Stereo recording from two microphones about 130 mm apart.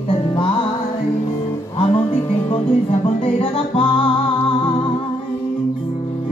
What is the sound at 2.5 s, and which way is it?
Music, 45° left (ahead or behind).